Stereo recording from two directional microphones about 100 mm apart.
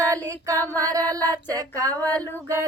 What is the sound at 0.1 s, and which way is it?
Female singing, 30° right (ahead or behind).